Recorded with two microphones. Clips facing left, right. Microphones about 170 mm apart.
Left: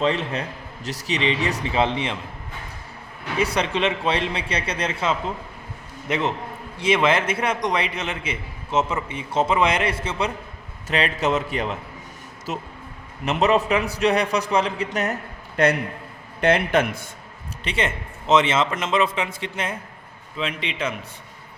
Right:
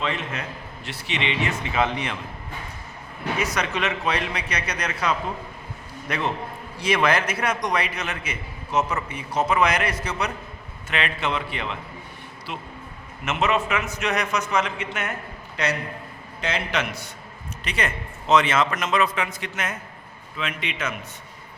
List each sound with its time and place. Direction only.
0.0 s a man's voice: 35° left (ahead or behind)
3.3 s a man's voice: 30° left (ahead or behind)
10.8 s a man's voice: 40° left (ahead or behind)
15.5 s a man's voice: 55° left (ahead or behind)
17.6 s a man's voice: 25° left (ahead or behind)